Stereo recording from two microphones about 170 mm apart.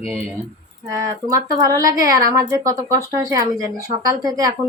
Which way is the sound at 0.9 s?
20° right (ahead or behind).